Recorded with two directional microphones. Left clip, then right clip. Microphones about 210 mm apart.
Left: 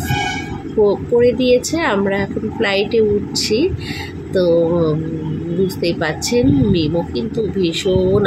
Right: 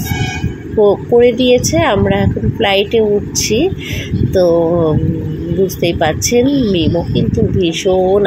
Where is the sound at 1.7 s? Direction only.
5° right (ahead or behind).